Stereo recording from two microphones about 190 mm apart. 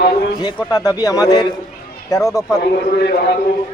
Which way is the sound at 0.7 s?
20° left (ahead or behind).